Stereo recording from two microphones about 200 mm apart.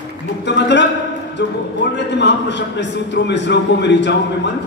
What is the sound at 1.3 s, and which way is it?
A man's voice, 60° left (ahead or behind).